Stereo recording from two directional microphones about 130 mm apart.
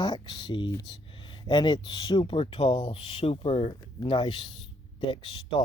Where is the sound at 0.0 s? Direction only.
35° left (ahead or behind).